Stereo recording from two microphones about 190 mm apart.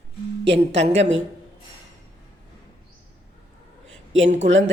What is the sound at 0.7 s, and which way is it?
Speech, 70° right (ahead or behind).